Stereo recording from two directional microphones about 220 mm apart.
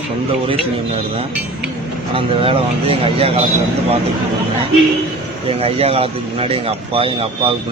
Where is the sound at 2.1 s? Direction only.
25° right (ahead or behind).